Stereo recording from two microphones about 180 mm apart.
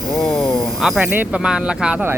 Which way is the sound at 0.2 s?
Centre (ahead or behind).